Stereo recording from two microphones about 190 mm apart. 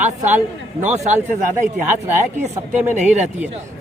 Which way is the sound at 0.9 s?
35° right (ahead or behind).